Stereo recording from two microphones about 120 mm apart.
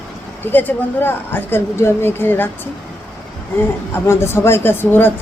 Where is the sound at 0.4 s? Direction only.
15° left (ahead or behind).